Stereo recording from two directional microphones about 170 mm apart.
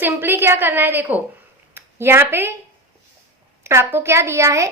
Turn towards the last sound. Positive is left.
turn(degrees=-15)  # may be behind; listen again after turning